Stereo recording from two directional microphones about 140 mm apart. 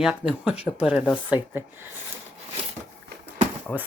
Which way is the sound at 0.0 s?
5° right (ahead or behind).